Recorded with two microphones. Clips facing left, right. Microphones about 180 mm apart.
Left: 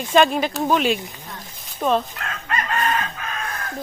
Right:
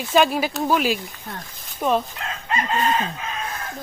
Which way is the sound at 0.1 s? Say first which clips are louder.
Left 1 dB; 5° right (ahead or behind).